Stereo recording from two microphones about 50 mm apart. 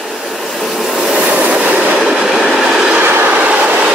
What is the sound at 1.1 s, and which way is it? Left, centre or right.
Train, right.